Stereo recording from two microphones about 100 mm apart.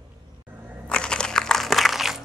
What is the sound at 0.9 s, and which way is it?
Crushing, 10° left (ahead or behind).